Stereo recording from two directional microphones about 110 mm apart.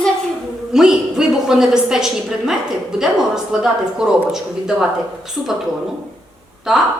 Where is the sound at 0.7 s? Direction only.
5° right (ahead or behind).